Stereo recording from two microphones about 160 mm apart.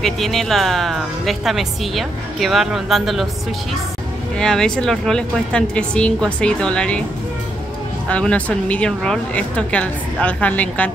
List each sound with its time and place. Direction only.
0.0 s speech: centre (ahead or behind)
4.4 s speech: 5° left (ahead or behind)
8.1 s a woman's voice: 5° left (ahead or behind)